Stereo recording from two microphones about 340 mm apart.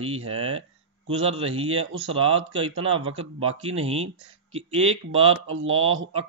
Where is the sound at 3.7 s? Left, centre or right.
Centre.